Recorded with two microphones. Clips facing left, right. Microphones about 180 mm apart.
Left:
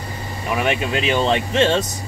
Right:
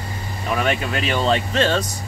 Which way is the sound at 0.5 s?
20° left (ahead or behind).